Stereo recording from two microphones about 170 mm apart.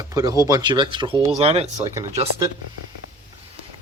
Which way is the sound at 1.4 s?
40° right (ahead or behind).